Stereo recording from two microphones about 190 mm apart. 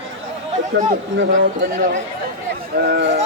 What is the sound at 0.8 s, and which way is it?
Speech, 40° right (ahead or behind).